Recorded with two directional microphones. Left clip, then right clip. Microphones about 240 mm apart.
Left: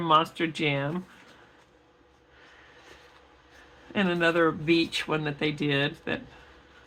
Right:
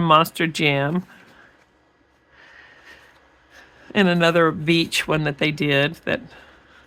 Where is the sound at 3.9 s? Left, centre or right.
Right.